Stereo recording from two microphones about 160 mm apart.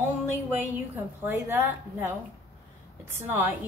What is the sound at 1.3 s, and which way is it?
Speech, 15° right (ahead or behind).